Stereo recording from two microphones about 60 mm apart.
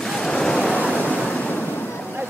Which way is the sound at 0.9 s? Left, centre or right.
Left.